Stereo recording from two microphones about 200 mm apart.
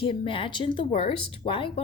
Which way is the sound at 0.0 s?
25° left (ahead or behind).